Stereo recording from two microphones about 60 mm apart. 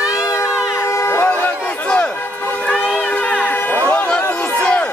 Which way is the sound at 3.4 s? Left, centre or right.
Left.